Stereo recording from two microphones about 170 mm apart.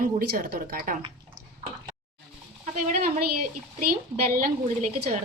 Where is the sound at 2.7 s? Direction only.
60° right (ahead or behind).